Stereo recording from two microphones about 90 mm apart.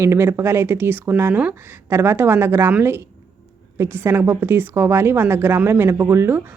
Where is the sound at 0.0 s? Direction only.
30° right (ahead or behind).